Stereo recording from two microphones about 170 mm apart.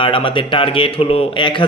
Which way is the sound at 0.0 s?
30° left (ahead or behind).